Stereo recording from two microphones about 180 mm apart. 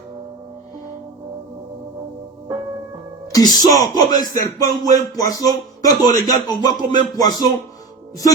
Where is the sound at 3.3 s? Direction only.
20° left (ahead or behind).